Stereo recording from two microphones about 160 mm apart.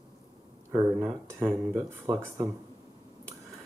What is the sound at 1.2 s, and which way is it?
Speech, 15° right (ahead or behind).